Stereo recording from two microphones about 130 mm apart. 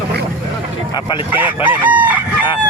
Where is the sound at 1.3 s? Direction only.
15° right (ahead or behind).